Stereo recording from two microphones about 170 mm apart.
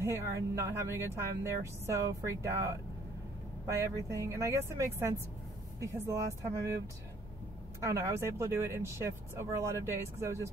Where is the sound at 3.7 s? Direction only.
20° right (ahead or behind).